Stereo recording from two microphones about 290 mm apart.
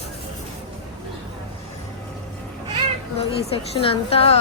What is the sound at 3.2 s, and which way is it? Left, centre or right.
A child's voice, centre.